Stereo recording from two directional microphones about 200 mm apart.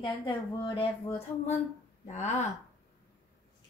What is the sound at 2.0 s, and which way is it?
Speech, 35° left (ahead or behind).